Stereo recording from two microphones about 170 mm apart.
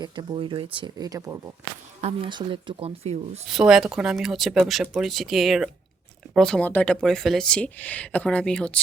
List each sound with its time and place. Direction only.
0.0 s speech: 25° right (ahead or behind)
2.0 s speech: 35° right (ahead or behind)
3.5 s speech: 5° right (ahead or behind)